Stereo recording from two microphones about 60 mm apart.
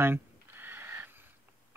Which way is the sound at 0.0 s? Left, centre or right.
Right.